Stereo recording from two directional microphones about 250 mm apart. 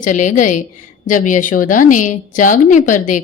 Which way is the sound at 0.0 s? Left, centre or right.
Left.